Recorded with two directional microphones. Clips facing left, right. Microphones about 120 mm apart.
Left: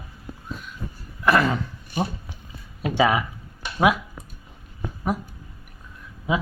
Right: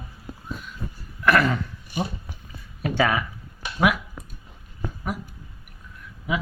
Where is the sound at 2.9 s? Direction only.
20° left (ahead or behind).